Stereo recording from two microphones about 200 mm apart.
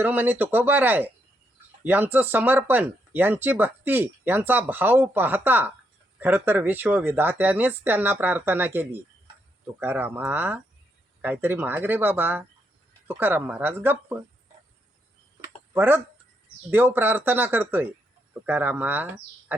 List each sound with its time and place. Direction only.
0.0 s speech: 10° right (ahead or behind)
15.7 s speech: 10° right (ahead or behind)